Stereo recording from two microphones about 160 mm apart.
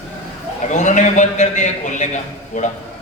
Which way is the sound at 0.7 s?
50° left (ahead or behind).